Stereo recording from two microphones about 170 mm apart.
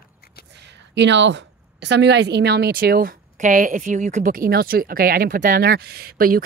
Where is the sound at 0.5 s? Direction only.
90° right.